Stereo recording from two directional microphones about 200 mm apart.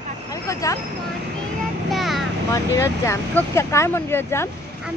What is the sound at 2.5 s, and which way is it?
Speech, 15° left (ahead or behind).